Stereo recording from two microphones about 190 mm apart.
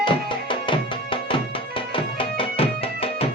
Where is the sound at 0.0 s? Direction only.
25° left (ahead or behind).